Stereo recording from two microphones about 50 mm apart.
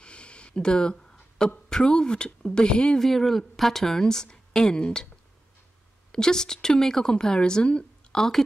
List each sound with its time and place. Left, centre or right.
0.0 s a sound: left
1.7 s speech: centre
3.0 s speech: centre
6.1 s speech: centre
8.2 s speech: centre